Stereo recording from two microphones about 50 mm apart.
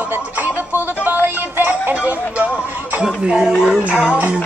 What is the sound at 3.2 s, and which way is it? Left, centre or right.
Speech, centre.